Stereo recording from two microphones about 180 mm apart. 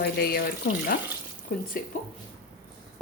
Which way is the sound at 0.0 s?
60° left (ahead or behind).